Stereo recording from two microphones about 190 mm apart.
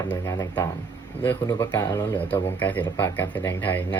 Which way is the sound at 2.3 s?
10° left (ahead or behind).